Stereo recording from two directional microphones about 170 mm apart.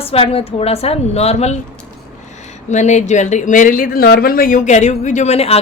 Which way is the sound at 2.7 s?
45° left (ahead or behind).